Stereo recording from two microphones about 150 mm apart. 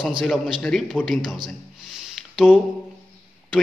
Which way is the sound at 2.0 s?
5° right (ahead or behind).